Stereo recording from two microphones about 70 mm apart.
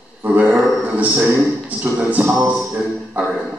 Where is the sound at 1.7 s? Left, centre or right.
Right.